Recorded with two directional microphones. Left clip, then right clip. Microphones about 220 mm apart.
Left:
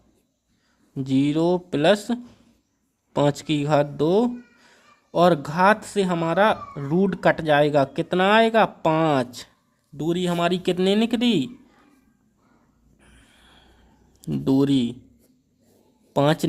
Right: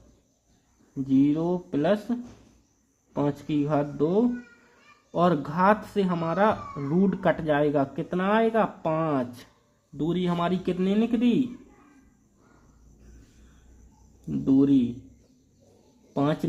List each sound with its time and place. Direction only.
1.0 s speech: 35° left (ahead or behind)
10.0 s speech: 25° left (ahead or behind)
14.3 s speech: 45° left (ahead or behind)
16.1 s speech: 45° left (ahead or behind)